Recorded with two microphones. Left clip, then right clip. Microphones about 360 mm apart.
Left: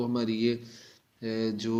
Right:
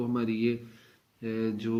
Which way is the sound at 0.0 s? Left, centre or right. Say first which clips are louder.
Left 1 dB; centre.